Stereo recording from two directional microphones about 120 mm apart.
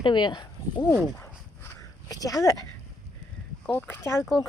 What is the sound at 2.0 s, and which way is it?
Speech, 30° left (ahead or behind).